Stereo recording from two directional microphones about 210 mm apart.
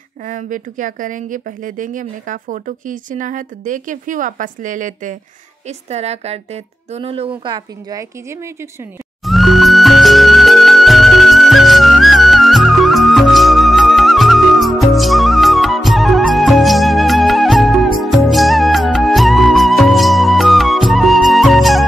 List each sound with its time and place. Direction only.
0.3 s speech: 40° right (ahead or behind); by 8.0 s 20° right (ahead or behind)
9.2 s music: centre (ahead or behind)